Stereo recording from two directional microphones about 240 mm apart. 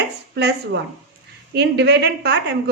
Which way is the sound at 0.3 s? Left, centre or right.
Right.